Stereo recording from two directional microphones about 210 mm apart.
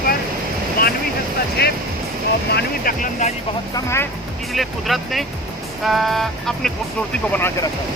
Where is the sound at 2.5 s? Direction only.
40° left (ahead or behind).